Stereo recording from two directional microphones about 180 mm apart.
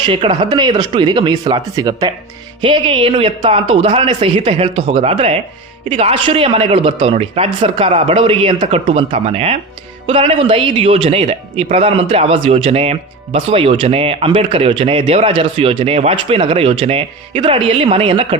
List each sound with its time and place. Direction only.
0.0 s speech: 25° right (ahead or behind)